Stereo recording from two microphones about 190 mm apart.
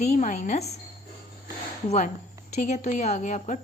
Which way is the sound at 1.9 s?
40° left (ahead or behind).